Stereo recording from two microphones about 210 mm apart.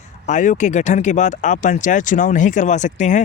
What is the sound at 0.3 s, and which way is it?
Speech, 35° left (ahead or behind).